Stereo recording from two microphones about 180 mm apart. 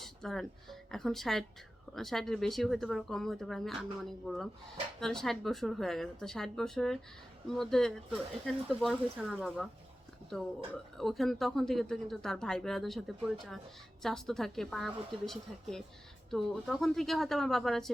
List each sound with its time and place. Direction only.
0.0 s speech: centre (ahead or behind)